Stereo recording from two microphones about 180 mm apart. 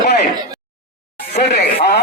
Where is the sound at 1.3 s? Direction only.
70° left (ahead or behind).